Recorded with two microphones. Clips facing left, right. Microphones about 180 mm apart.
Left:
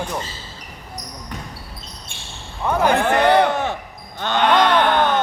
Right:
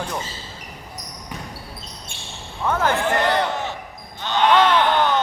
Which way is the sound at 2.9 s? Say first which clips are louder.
Left 5 dB; 60° left (ahead or behind).